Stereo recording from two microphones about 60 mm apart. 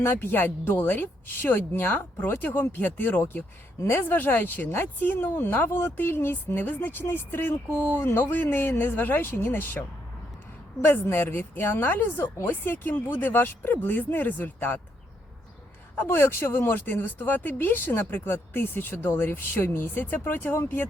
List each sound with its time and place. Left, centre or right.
0.0 s speech: left
10.8 s speech: left
16.0 s speech: left